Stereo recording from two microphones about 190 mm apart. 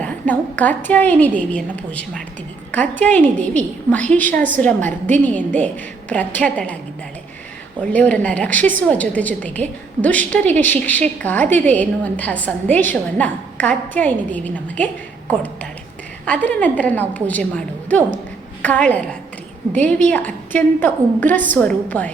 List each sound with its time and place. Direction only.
0.0 s a woman's voice: 10° left (ahead or behind)
4.9 s a woman's voice: 40° right (ahead or behind)
5.5 s a woman's voice: 10° left (ahead or behind)
7.8 s a woman's voice: 5° left (ahead or behind)
16.2 s a woman's voice: 5° left (ahead or behind)